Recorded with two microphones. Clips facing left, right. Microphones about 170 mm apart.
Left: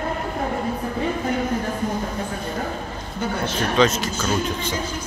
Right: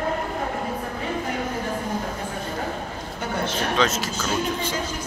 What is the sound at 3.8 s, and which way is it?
Speech, 5° right (ahead or behind).